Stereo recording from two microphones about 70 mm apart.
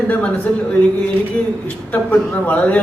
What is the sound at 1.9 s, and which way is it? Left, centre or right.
Speech, left.